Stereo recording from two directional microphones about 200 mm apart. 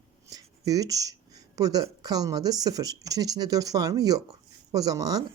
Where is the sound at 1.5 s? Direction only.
20° right (ahead or behind).